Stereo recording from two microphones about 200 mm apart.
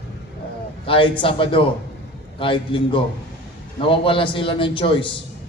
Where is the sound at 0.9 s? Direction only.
25° left (ahead or behind).